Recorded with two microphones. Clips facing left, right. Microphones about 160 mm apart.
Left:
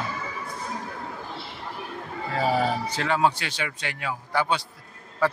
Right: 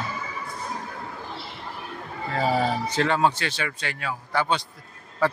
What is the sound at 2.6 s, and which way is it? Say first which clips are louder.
A man's voice: right 2 dB; 10° left (ahead or behind).